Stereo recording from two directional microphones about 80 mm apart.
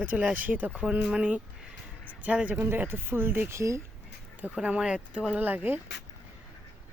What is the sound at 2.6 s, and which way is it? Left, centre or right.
Speech, right.